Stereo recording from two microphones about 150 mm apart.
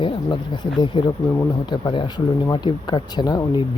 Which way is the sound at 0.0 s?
35° left (ahead or behind).